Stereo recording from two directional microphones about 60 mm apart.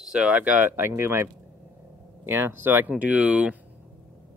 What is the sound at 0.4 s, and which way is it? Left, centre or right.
Speech, right.